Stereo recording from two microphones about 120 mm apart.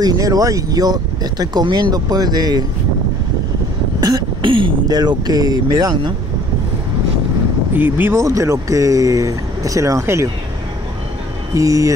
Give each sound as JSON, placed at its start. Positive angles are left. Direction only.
{"t": 0.0, "sound": "speech", "side_deg": -30}
{"t": 4.0, "sound": "speech", "side_deg": -35}
{"t": 7.7, "sound": "speech", "side_deg": -15}
{"t": 11.5, "sound": "speech", "side_deg": -25}